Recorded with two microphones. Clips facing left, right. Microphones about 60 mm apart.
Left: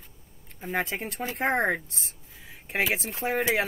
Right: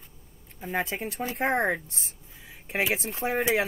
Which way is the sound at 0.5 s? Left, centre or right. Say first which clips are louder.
Even; centre.